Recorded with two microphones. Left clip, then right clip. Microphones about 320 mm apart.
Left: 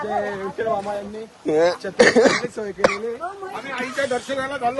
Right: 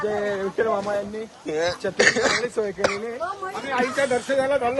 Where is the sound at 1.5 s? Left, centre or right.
Centre.